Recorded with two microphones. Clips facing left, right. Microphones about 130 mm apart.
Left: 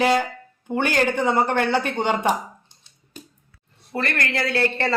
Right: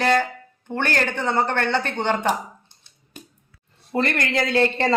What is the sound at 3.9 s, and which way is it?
Speech, 20° right (ahead or behind).